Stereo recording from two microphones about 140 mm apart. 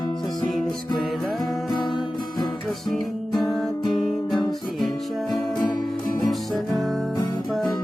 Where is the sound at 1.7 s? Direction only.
35° left (ahead or behind).